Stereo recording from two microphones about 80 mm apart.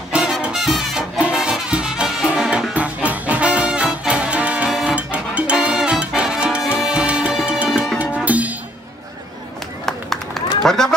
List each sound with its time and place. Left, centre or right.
0.1 s music: centre
2.7 s music: centre
4.6 s music: centre
4.9 s music: centre
9.8 s run: centre